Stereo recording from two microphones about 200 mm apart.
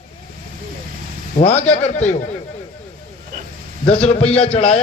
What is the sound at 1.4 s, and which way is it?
Speech, 35° left (ahead or behind).